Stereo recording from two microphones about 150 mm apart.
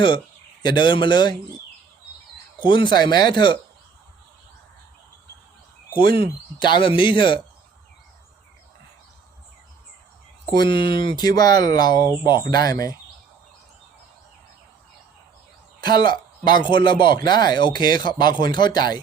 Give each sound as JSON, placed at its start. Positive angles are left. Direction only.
{"t": 0.6, "sound": "speech", "side_deg": 30}
{"t": 2.6, "sound": "speech", "side_deg": 30}
{"t": 6.6, "sound": "speech", "side_deg": 30}
{"t": 10.5, "sound": "speech", "side_deg": 30}
{"t": 15.8, "sound": "speech", "side_deg": 30}